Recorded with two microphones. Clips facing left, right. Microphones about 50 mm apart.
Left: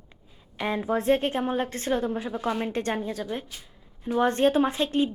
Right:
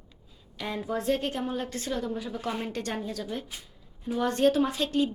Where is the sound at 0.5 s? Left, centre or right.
Left.